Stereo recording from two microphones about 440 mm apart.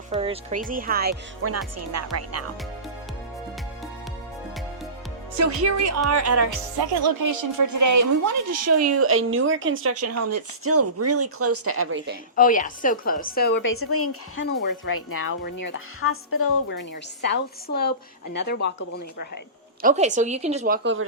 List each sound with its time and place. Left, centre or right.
0.1 s a woman's voice: centre; by 2.5 s right
5.4 s a woman's voice: right
6.7 s a woman's voice: right
12.4 s a woman's voice: centre
19.8 s a woman's voice: centre